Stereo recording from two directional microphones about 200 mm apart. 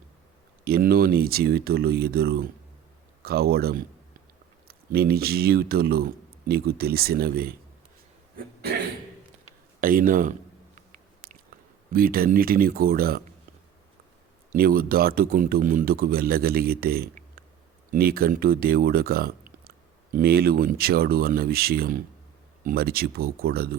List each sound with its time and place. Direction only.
0.6 s speech: 50° right (ahead or behind)
8.4 s a sound: 50° right (ahead or behind)
9.8 s speech: 45° right (ahead or behind)
10.8 s a sound: 40° right (ahead or behind)
11.9 s speech: 45° right (ahead or behind)
14.5 s speech: 45° right (ahead or behind)